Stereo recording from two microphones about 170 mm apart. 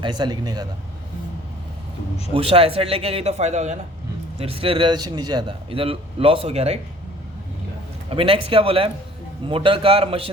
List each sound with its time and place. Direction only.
0.0 s speech: 25° right (ahead or behind)
2.3 s a man's voice: 35° right (ahead or behind)
8.1 s a man's voice: 30° right (ahead or behind)